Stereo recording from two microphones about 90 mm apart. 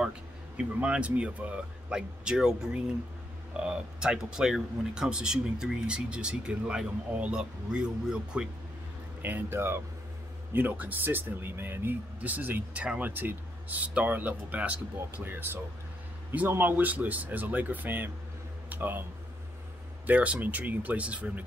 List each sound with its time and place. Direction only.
0.6 s speech: 15° right (ahead or behind)
9.2 s speech: 25° right (ahead or behind)
20.1 s speech: 15° right (ahead or behind)